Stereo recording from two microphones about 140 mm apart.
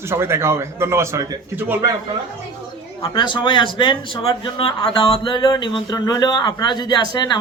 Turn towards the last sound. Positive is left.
turn(degrees=30)  # may be behind; listen again after turning